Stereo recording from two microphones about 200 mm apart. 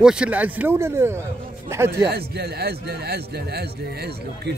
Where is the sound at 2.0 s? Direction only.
55° right (ahead or behind).